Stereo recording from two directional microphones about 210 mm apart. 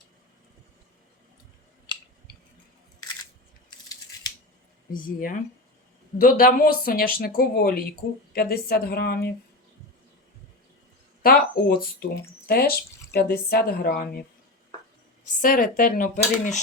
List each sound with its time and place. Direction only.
1.9 s scissors: 20° left (ahead or behind)
4.9 s speech: 40° left (ahead or behind)
11.2 s speech: 45° left (ahead or behind)
15.4 s speech: 40° left (ahead or behind)